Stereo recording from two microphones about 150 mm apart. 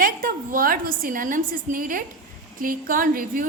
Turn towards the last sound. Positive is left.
turn(degrees=-70)  # may be behind; listen again after turning